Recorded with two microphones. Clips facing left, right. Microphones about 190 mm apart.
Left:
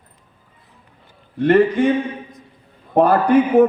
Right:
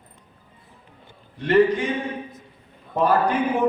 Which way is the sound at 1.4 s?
55° left (ahead or behind).